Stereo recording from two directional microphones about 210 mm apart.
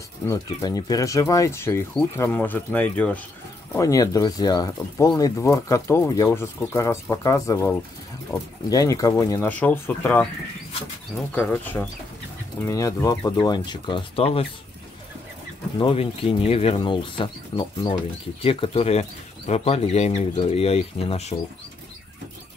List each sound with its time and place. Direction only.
0.3 s speech: 15° left (ahead or behind)
11.3 s speech: 10° left (ahead or behind); by 14.5 s 25° left (ahead or behind)
15.8 s speech: 25° left (ahead or behind)